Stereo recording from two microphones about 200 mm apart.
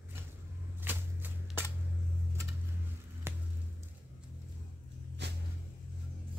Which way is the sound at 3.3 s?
10° right (ahead or behind).